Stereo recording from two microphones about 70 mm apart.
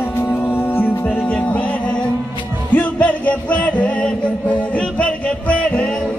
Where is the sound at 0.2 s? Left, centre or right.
Left.